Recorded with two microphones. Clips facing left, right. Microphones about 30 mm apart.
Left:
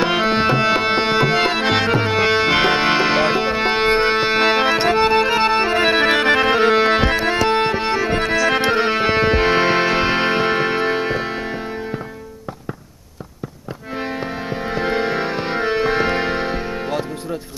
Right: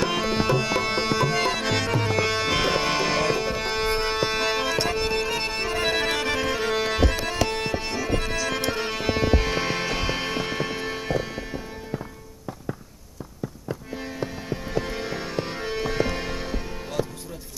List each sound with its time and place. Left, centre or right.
0.0 s music: left
14.0 s music: left